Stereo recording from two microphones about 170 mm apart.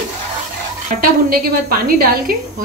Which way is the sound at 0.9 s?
60° right (ahead or behind).